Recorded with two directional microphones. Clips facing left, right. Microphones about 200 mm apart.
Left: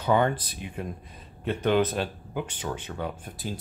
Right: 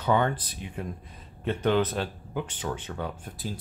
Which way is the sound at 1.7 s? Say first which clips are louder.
Left 2 dB; 15° left (ahead or behind).